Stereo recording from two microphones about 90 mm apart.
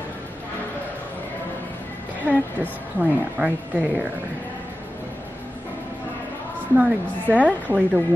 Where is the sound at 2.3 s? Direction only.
20° right (ahead or behind).